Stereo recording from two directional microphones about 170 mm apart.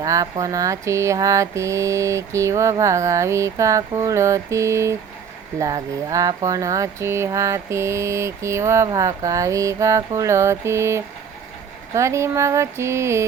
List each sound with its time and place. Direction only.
0.0 s speech: 20° right (ahead or behind)